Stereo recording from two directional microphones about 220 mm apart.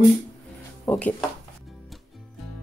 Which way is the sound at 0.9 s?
5° left (ahead or behind).